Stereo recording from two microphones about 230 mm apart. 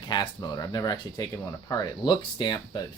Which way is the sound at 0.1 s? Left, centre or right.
Centre.